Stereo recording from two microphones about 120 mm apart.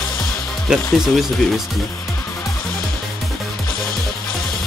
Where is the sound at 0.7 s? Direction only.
5° right (ahead or behind).